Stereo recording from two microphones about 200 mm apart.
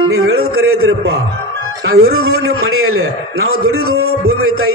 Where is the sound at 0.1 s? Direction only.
90° right.